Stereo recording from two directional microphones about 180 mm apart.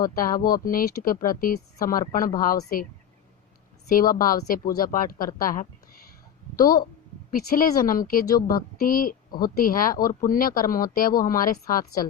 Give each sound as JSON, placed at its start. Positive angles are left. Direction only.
{"t": 0.0, "sound": "speech", "side_deg": 50}
{"t": 3.8, "sound": "speech", "side_deg": 50}
{"t": 7.3, "sound": "speech", "side_deg": 50}